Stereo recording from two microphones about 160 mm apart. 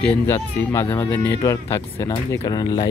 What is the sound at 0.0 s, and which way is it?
Speech, 10° left (ahead or behind).